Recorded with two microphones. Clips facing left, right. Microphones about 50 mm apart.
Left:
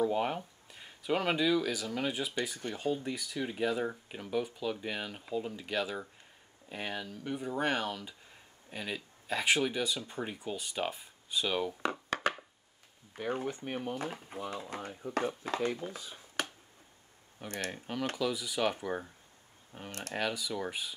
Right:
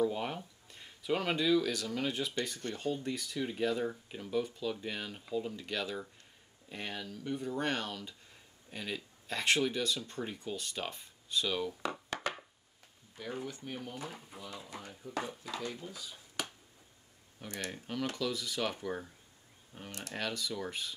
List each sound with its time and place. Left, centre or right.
0.0 s speech: centre
11.8 s a sound: left
13.1 s speech: left
17.6 s speech: centre
19.9 s speech: left
20.2 s speech: centre